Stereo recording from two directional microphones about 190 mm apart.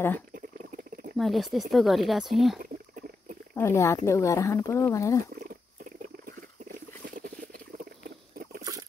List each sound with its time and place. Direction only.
1.1 s speech: centre (ahead or behind)
3.5 s speech: 15° left (ahead or behind)
6.2 s a sound: 45° right (ahead or behind)